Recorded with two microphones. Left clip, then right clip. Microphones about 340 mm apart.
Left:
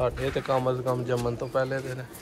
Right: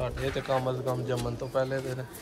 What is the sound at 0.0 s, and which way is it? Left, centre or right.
Speech, centre.